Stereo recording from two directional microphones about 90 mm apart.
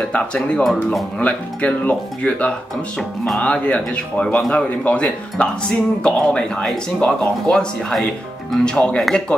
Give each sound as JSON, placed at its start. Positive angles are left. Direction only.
{"t": 0.0, "sound": "speech", "side_deg": 10}